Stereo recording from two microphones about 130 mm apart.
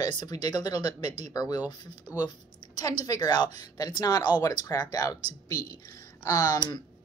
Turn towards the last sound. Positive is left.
turn(degrees=25)  # may be behind; listen again after turning